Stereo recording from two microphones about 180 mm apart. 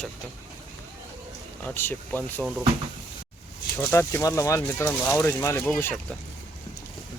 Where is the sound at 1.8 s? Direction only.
10° left (ahead or behind).